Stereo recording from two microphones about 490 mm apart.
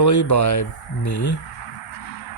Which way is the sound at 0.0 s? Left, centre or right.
Left.